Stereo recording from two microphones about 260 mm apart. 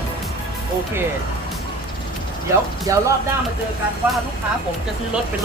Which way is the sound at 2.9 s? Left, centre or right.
Centre.